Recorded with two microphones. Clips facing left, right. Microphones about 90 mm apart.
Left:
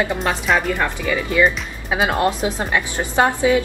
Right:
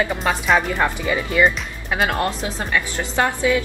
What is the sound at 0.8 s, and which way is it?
Speech, 20° right (ahead or behind).